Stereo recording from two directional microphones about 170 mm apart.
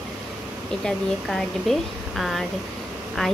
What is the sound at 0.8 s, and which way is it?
Speech, centre (ahead or behind).